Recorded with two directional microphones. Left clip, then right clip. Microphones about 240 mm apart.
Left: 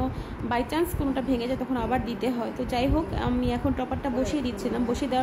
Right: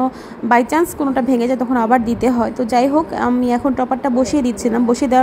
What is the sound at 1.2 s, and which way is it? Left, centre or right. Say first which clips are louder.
Speech: right 11 dB; right.